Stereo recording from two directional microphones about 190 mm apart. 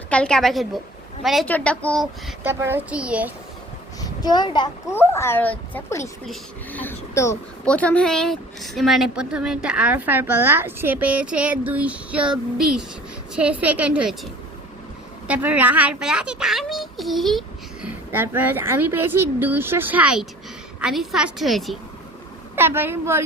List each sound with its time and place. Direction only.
0.1 s speech: 5° left (ahead or behind)
2.4 s speech: 10° right (ahead or behind)
4.0 s a child's voice: 20° left (ahead or behind)
4.9 s speech: 15° left (ahead or behind); by 14.2 s 5° right (ahead or behind)
15.3 s speech: 10° right (ahead or behind)
22.5 s speech: 10° right (ahead or behind)